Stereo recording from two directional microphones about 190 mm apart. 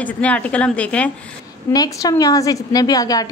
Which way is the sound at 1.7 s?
20° left (ahead or behind).